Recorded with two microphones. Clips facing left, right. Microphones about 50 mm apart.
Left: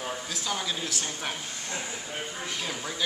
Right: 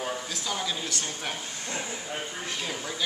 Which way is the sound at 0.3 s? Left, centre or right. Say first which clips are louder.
Even; centre.